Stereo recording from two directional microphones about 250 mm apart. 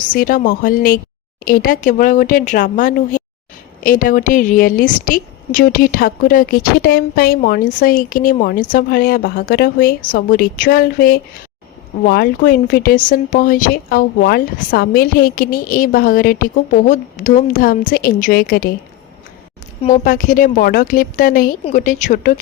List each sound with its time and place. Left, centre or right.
0.0 s a woman's voice: left
19.8 s a woman's voice: left